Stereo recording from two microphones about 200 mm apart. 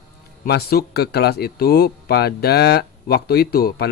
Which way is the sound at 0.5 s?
50° left (ahead or behind).